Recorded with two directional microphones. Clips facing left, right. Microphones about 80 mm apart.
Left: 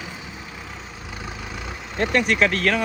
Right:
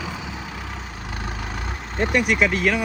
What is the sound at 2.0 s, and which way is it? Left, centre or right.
Speech, centre.